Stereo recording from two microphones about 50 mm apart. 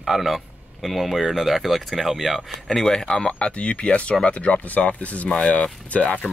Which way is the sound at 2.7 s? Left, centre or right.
Centre.